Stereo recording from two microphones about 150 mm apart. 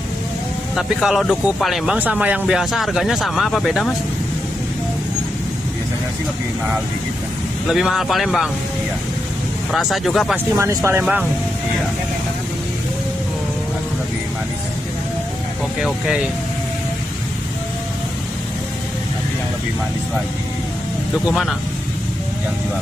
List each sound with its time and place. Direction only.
0.7 s speech: centre (ahead or behind)
2.0 s speech: 10° right (ahead or behind)
7.6 s speech: centre (ahead or behind)
9.7 s speech: centre (ahead or behind)
10.5 s speech: 20° right (ahead or behind)
21.3 s speech: centre (ahead or behind)